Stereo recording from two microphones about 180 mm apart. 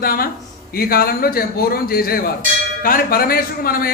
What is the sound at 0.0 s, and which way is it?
A man's voice, 55° left (ahead or behind).